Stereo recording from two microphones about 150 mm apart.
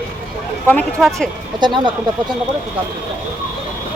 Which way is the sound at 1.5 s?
30° right (ahead or behind).